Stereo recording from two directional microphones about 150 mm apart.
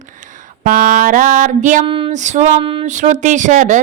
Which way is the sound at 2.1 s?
55° right (ahead or behind).